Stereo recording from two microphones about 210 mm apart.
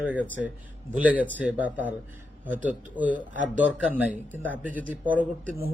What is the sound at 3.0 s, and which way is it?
A man's voice, 5° right (ahead or behind).